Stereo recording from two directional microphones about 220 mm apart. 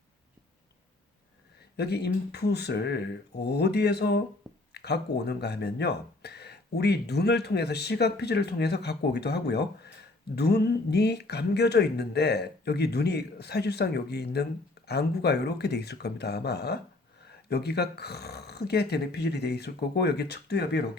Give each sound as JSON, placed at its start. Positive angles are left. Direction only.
{"t": 1.7, "sound": "speech", "side_deg": 50}